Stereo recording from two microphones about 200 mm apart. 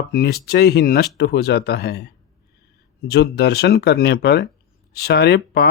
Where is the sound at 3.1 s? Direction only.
55° left (ahead or behind).